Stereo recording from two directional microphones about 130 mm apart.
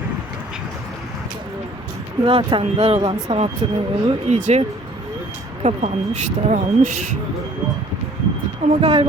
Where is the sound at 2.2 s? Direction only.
45° right (ahead or behind); by 6.9 s 70° right (ahead or behind).